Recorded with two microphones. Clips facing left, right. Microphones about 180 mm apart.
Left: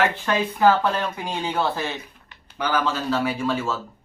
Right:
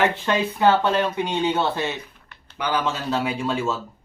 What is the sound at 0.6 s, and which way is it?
Speech, 25° right (ahead or behind).